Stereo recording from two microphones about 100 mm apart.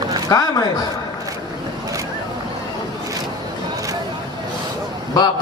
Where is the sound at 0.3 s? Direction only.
40° left (ahead or behind).